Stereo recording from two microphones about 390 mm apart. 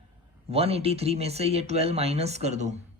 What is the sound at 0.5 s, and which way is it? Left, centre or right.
Speech, centre.